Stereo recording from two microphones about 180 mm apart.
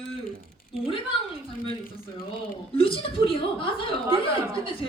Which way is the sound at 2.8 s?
30° left (ahead or behind).